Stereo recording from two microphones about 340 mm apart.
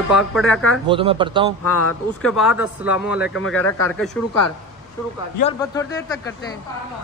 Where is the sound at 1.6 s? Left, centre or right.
Left.